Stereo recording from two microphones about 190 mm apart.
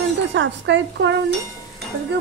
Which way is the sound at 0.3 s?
70° right (ahead or behind).